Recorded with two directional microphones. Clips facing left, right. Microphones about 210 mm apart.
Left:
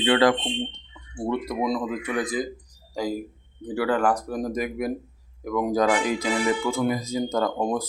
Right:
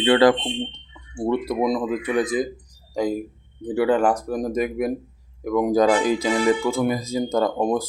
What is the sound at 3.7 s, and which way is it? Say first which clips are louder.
Speech: right 4 dB; 25° right (ahead or behind).